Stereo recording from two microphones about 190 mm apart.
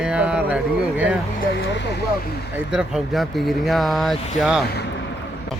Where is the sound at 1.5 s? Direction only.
65° left (ahead or behind).